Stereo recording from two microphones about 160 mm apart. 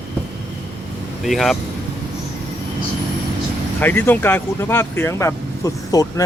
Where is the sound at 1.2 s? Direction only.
Centre (ahead or behind).